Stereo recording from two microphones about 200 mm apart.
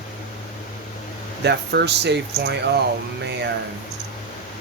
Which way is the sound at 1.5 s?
55° right (ahead or behind).